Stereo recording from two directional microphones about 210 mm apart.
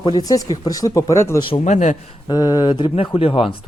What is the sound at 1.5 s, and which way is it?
Speech, 30° left (ahead or behind).